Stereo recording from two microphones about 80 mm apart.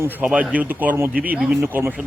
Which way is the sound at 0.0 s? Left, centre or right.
Right.